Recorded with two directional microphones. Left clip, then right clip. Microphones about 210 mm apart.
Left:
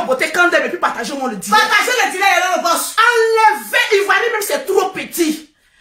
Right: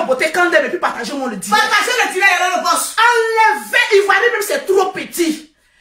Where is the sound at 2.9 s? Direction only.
10° left (ahead or behind).